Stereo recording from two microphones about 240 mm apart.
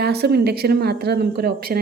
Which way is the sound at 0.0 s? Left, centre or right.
Right.